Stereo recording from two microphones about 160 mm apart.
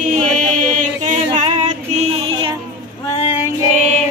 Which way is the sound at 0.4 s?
55° right (ahead or behind).